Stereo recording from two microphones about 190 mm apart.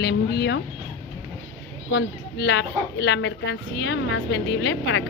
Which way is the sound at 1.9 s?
65° left (ahead or behind).